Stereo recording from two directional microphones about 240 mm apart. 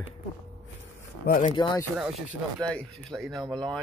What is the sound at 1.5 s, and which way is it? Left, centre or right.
Speech, centre.